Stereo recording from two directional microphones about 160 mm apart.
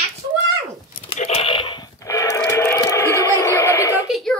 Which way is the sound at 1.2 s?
35° left (ahead or behind).